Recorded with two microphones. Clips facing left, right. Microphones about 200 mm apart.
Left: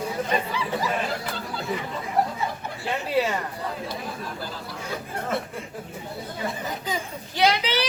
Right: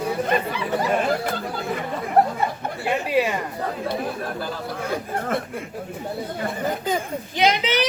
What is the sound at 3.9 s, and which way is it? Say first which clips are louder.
Speech: right 6 dB; 60° right (ahead or behind).